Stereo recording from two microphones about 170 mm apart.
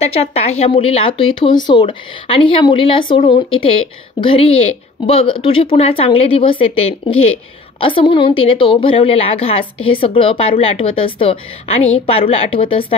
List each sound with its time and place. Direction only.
0.0 s speech: 35° left (ahead or behind)